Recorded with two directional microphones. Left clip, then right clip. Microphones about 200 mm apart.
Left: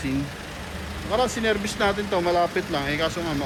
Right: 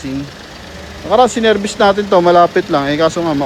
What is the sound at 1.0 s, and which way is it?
Speech, 40° right (ahead or behind).